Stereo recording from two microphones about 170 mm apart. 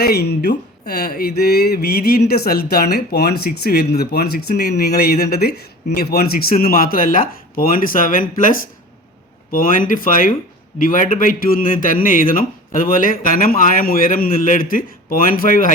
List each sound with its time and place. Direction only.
0.0 s a man's voice: 70° left (ahead or behind)